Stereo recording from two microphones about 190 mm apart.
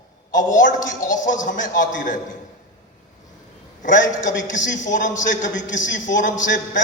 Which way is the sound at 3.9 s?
45° left (ahead or behind).